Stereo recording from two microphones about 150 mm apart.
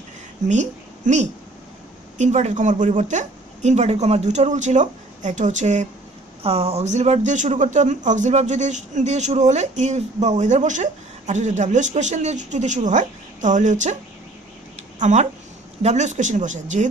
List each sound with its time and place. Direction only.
0.5 s a woman's voice: 50° right (ahead or behind)
6.4 s speech: 40° right (ahead or behind)
15.0 s speech: 50° right (ahead or behind)